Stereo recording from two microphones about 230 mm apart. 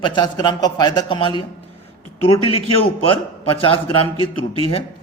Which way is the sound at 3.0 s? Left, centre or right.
Left.